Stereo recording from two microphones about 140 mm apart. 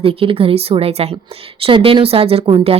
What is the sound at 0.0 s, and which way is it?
A woman's voice, 40° right (ahead or behind).